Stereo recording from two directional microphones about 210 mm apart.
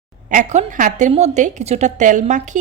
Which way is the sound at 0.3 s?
40° right (ahead or behind).